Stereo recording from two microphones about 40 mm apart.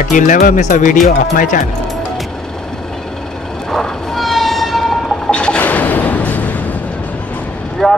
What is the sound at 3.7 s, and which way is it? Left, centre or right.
Train, centre.